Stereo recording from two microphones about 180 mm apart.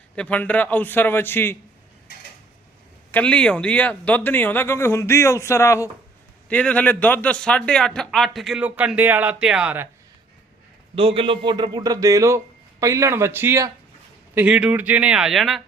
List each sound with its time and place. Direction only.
0.2 s speech: 10° left (ahead or behind)
3.1 s a man's voice: 5° left (ahead or behind); by 9.9 s 10° right (ahead or behind)
10.9 s a man's voice: 30° right (ahead or behind); by 15.6 s centre (ahead or behind)